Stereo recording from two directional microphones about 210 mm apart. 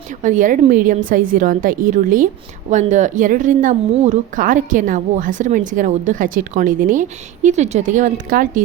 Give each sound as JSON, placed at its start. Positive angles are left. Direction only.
{"t": 0.2, "sound": "a woman's voice", "side_deg": -40}